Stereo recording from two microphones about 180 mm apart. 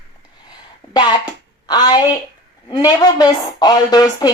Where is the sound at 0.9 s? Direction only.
25° left (ahead or behind).